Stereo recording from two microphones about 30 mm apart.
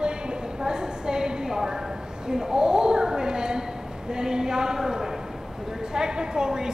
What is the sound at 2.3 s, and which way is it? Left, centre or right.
A woman's voice, right.